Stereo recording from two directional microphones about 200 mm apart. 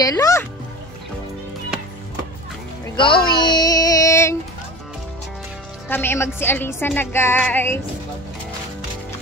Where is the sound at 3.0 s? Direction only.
25° left (ahead or behind).